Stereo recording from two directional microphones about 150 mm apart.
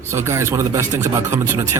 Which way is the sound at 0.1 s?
20° right (ahead or behind).